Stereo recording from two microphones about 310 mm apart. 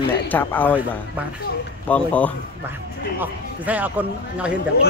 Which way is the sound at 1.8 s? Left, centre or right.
Centre.